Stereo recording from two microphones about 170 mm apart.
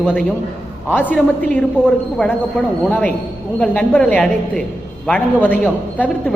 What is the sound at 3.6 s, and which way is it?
A man's voice, 5° left (ahead or behind).